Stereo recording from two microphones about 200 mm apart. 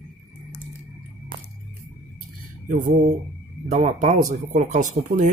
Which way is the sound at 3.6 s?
35° right (ahead or behind).